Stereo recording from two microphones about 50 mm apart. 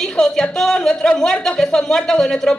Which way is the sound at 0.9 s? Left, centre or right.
Centre.